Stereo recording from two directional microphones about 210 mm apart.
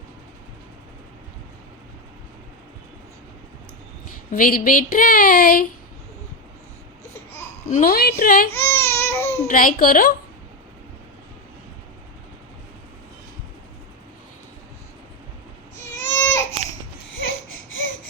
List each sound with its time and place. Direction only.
4.3 s speech: 40° left (ahead or behind)
7.7 s a woman's voice: 40° left (ahead or behind)
8.5 s baby cry: 10° left (ahead or behind)
9.5 s speech: 40° left (ahead or behind)
16.0 s baby cry: 10° left (ahead or behind)